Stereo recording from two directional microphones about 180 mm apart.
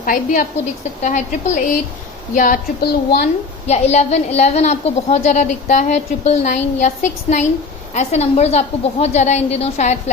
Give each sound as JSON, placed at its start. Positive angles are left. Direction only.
{"t": 0.0, "sound": "speech", "side_deg": 50}
{"t": 3.7, "sound": "a woman's voice", "side_deg": 40}